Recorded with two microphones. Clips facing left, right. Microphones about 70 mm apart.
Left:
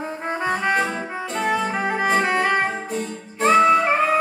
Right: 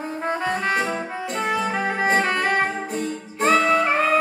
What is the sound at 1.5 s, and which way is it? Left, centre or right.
Music, centre.